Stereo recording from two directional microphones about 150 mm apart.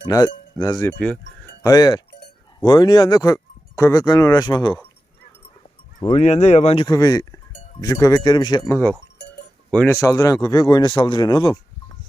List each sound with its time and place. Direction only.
0.1 s speech: 25° left (ahead or behind)
0.9 s speech: 5° left (ahead or behind)
1.6 s speech: 25° left (ahead or behind)
6.0 s speech: 35° left (ahead or behind)
6.2 s speech: 45° left (ahead or behind)
6.8 s speech: 25° left (ahead or behind)